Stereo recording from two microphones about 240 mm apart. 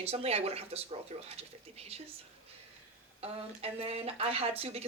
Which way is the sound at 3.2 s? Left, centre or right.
Right.